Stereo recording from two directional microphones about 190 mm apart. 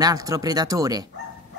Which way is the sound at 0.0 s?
20° right (ahead or behind).